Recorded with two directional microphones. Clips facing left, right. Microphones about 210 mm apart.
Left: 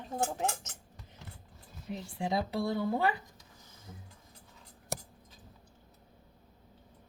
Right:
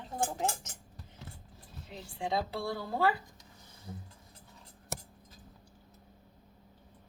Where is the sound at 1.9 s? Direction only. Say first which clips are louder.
Left 1 dB; 20° left (ahead or behind).